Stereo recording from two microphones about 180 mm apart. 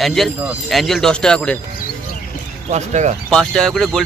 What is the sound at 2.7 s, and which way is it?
Speech, 40° right (ahead or behind).